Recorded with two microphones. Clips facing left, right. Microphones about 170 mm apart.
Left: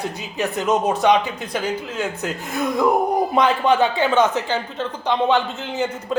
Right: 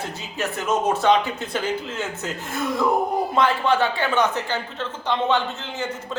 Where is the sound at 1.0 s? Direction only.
15° left (ahead or behind).